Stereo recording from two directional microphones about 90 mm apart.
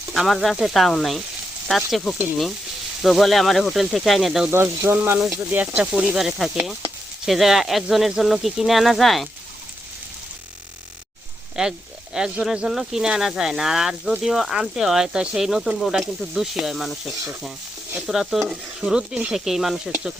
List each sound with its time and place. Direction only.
0.1 s sizzle: centre (ahead or behind)
4.4 s frying: 25° right (ahead or behind)
5.4 s speech: 20° right (ahead or behind)
6.1 s sizzle: 5° right (ahead or behind)
11.6 s speech: 10° right (ahead or behind)
12.1 s sizzle: 5° right (ahead or behind)